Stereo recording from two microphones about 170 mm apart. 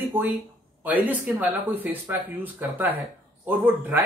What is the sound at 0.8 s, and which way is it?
Speech, 10° right (ahead or behind).